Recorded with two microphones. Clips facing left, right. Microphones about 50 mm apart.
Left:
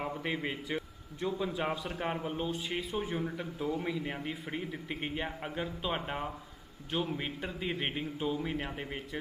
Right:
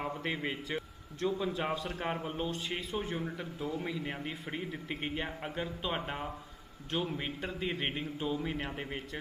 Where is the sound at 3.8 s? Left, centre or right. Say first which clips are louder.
Left 2 dB; centre.